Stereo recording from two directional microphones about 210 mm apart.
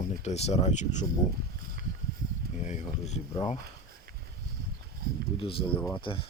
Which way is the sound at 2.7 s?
30° left (ahead or behind).